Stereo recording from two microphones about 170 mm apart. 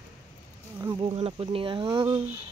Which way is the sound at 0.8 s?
25° right (ahead or behind).